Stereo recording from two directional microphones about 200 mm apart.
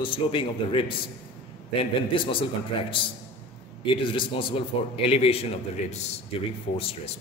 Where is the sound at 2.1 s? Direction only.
25° left (ahead or behind).